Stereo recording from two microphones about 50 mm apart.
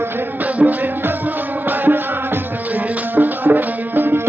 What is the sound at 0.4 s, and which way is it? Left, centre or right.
Music, right.